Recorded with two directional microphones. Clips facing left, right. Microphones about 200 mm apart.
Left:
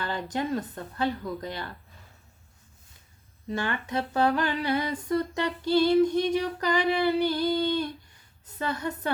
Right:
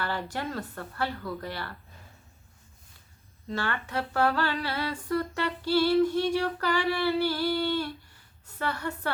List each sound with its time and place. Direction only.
0.0 s humming: 20° left (ahead or behind)
3.4 s humming: 20° left (ahead or behind)